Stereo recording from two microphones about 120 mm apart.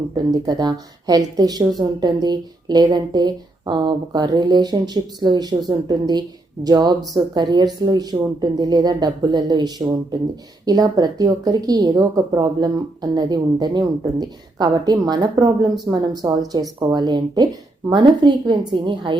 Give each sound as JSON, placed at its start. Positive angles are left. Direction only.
{"t": 0.3, "sound": "a woman's voice", "side_deg": -35}